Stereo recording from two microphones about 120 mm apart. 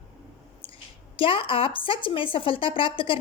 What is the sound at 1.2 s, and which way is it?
A woman's voice, 45° left (ahead or behind).